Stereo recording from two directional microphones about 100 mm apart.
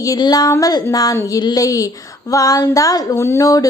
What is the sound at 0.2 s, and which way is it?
Child singing, 40° left (ahead or behind).